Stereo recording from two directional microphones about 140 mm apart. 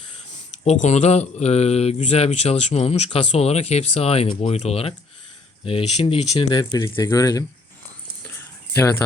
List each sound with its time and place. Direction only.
0.6 s speech: 50° left (ahead or behind); by 7.4 s 25° left (ahead or behind)
8.7 s speech: 20° left (ahead or behind)